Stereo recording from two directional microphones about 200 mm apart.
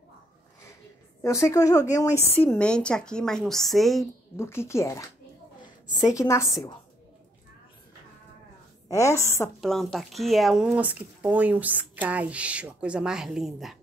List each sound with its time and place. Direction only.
1.2 s speech: 15° left (ahead or behind)
4.4 s speech: 10° left (ahead or behind)
8.8 s speech: 15° left (ahead or behind)
9.6 s speech: centre (ahead or behind)